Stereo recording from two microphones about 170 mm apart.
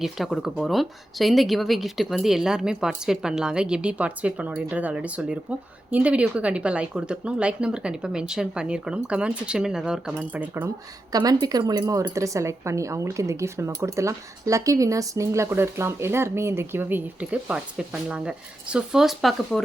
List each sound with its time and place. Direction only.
0.0 s speech: centre (ahead or behind)
11.1 s speech: 25° right (ahead or behind); by 19.6 s centre (ahead or behind)